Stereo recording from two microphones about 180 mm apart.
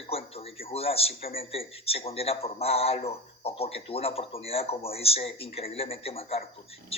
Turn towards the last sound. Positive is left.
turn(degrees=35)  # may be behind; listen again after turning